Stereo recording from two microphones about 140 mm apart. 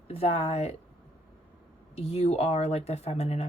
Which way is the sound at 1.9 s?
50° left (ahead or behind).